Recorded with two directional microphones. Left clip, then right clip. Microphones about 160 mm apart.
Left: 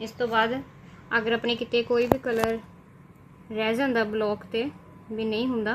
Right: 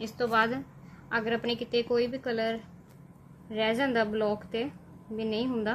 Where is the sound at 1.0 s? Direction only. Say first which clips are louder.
Left 5 dB; 35° left (ahead or behind).